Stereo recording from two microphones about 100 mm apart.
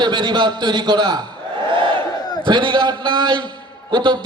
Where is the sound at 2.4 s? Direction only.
50° right (ahead or behind).